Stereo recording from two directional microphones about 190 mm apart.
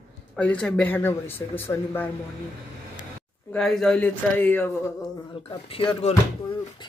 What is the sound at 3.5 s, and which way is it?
A man's voice, centre (ahead or behind).